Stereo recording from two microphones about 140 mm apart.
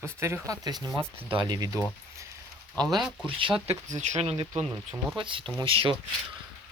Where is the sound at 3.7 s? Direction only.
55° right (ahead or behind).